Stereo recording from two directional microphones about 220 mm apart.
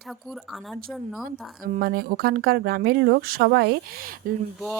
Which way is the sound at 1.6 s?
40° right (ahead or behind).